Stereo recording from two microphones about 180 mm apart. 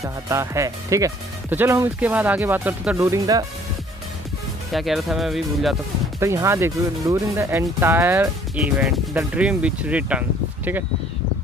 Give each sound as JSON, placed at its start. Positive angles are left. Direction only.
{"t": 0.0, "sound": "speech", "side_deg": -15}
{"t": 4.7, "sound": "speech", "side_deg": 0}
{"t": 6.1, "sound": "speech", "side_deg": -15}